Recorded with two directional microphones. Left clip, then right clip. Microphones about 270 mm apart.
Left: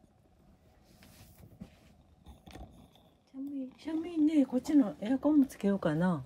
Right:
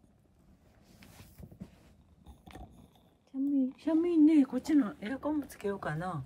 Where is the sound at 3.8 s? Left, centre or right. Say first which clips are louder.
Right 6 dB; centre.